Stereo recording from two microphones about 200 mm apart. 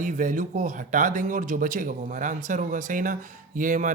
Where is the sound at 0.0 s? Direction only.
40° right (ahead or behind).